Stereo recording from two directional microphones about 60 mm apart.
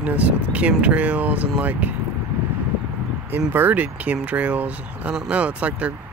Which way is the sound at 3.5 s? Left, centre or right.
Right.